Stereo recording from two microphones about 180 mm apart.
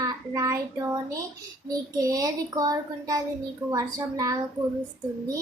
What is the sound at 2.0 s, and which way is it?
A child's voice, 20° right (ahead or behind).